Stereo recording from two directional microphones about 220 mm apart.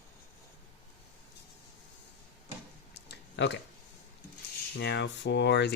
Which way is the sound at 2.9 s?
50° left (ahead or behind).